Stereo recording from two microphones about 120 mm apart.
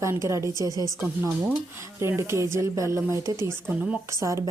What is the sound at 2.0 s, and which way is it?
A woman's voice, 25° right (ahead or behind).